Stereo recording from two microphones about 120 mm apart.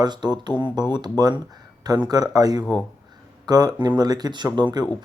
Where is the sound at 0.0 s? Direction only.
35° right (ahead or behind).